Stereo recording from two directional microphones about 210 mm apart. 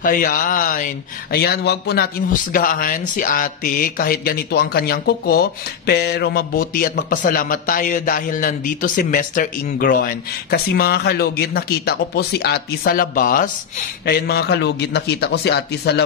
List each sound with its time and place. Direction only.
0.0 s speech: 40° left (ahead or behind)